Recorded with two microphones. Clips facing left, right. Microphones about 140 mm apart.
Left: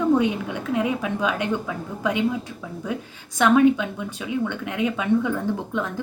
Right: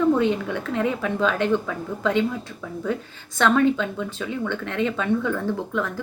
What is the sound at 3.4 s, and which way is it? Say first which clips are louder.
A woman's voice: left 2 dB; 15° left (ahead or behind).